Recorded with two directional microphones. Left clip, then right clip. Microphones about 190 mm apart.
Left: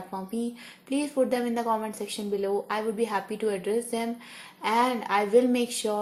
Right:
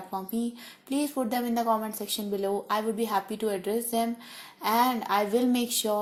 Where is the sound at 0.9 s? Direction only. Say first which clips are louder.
Left 4 dB; 35° right (ahead or behind).